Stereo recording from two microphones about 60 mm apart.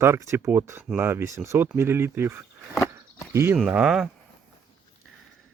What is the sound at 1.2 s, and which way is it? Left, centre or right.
Speech, right.